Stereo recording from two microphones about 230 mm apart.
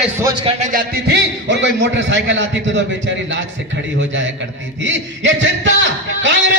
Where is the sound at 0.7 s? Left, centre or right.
Right.